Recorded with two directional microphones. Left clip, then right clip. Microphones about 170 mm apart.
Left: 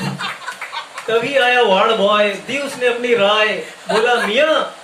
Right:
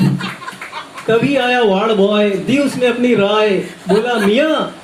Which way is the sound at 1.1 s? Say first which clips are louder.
Right 1 dB; 50° right (ahead or behind).